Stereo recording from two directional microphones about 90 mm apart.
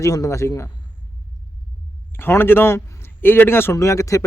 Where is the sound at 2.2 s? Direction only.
25° left (ahead or behind).